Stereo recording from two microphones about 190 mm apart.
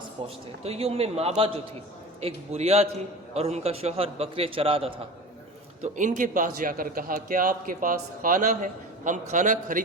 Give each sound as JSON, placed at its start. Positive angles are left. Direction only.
{"t": 0.2, "sound": "a man's voice", "side_deg": -30}
{"t": 5.8, "sound": "a man's voice", "side_deg": -40}